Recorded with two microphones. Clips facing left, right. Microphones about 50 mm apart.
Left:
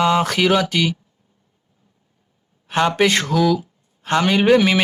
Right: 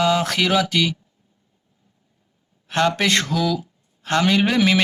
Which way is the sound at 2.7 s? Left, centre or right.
Centre.